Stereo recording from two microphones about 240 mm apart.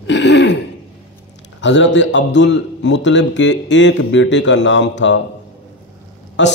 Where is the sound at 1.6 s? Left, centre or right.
Left.